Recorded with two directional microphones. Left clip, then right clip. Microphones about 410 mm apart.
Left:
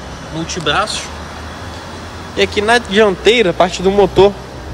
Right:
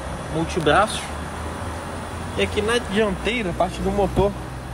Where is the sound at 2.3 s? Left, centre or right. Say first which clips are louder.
Left 9 dB; centre.